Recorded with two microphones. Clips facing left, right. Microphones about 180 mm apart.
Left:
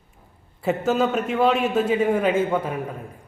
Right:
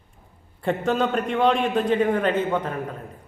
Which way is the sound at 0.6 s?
5° left (ahead or behind).